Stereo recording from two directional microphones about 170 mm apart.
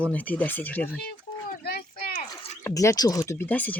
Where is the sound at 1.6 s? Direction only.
60° left (ahead or behind).